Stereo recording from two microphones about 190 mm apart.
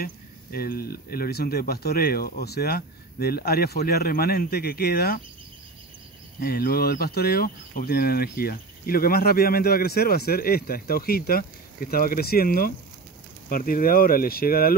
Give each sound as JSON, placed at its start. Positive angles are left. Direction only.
{"t": 0.0, "sound": "speech", "side_deg": 50}
{"t": 6.4, "sound": "speech", "side_deg": 55}